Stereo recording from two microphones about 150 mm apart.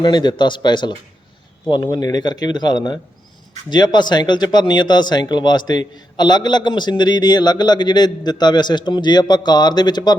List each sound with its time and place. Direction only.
0.0 s speech: 30° left (ahead or behind)